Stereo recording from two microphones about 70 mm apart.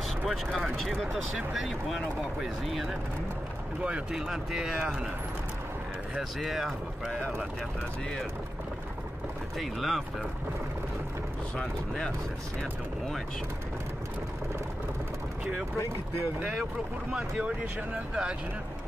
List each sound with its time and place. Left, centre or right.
0.7 s speech: centre
3.8 s speech: centre
6.4 s speech: centre
9.6 s speech: centre
11.5 s speech: centre
17.1 s speech: centre